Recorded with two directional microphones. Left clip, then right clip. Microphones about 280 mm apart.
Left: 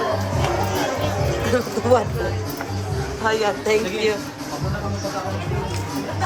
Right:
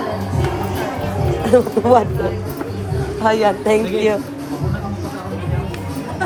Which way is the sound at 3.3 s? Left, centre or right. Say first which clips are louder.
Right 4 dB; centre.